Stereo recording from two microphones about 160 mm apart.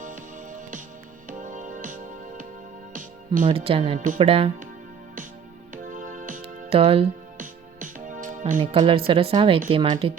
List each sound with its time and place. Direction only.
0.0 s music: 50° right (ahead or behind)
3.4 s speech: 35° right (ahead or behind)
5.7 s music: 55° right (ahead or behind)
6.4 s music: 35° right (ahead or behind)
7.3 s music: 55° right (ahead or behind)
8.5 s speech: 30° right (ahead or behind)